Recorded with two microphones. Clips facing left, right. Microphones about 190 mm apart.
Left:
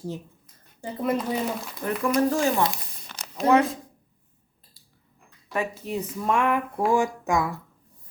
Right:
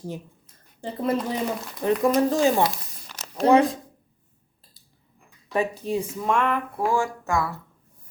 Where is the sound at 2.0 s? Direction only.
35° right (ahead or behind).